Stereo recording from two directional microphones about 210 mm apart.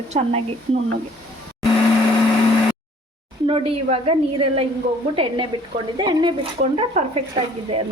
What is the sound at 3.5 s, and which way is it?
Speech, 25° right (ahead or behind).